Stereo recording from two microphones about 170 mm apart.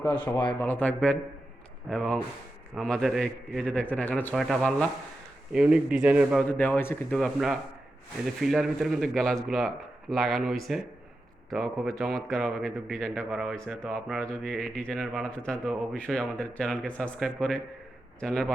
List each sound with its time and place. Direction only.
0.3 s speech: 25° left (ahead or behind)
0.6 s speech: 10° left (ahead or behind); by 6.4 s 5° right (ahead or behind)
6.5 s speech: 10° left (ahead or behind)
7.2 s speech: centre (ahead or behind)